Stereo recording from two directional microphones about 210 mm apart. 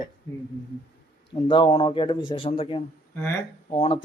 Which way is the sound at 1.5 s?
25° left (ahead or behind).